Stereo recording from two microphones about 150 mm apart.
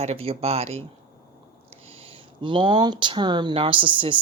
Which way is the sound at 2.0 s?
35° right (ahead or behind).